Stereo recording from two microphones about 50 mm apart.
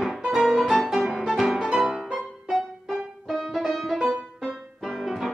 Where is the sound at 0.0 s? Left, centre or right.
Centre.